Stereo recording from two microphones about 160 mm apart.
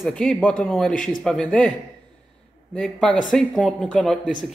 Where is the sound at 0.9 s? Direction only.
55° left (ahead or behind).